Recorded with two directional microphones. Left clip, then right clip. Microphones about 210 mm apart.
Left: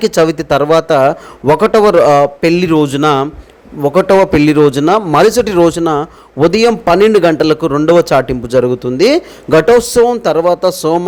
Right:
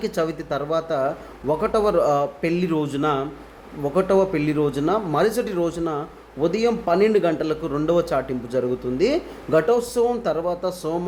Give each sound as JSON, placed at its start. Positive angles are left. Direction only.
{"t": 0.0, "sound": "a man's voice", "side_deg": 45}